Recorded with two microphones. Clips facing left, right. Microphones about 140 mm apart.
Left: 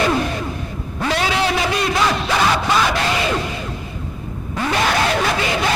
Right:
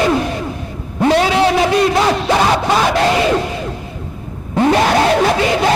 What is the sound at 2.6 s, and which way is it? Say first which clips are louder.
Crowd: right 5 dB; 35° right (ahead or behind).